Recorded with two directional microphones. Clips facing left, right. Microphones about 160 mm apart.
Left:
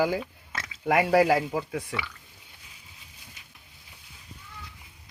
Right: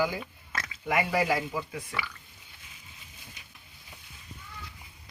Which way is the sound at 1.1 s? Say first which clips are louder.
Left 6 dB; 75° left (ahead or behind).